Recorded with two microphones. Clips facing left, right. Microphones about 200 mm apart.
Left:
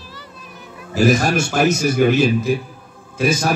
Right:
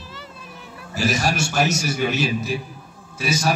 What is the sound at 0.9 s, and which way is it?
A man's voice, 55° left (ahead or behind).